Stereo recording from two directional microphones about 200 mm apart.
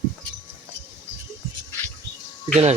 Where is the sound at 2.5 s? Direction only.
35° right (ahead or behind).